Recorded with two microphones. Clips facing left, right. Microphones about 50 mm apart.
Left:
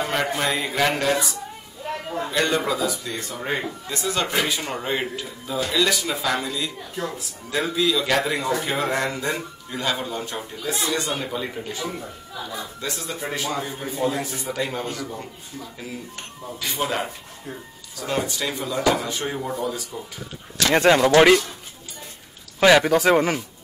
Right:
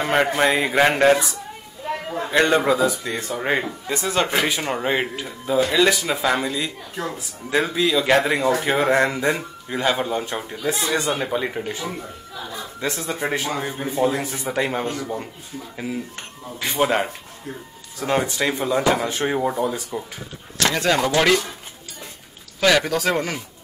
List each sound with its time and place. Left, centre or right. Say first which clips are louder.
0.1 s speech: right 5 dB; right
1.9 s a man's voice: right 2 dB; centre
2.3 s speech: right 6 dB; right
4.4 s speech: right 3 dB; centre
11.8 s speech: right 1 dB; centre
12.8 s speech: right 7 dB; right
16.5 s speech: right 5 dB; right
20.7 s speech: left 6 dB; left
22.6 s speech: left 3 dB; centre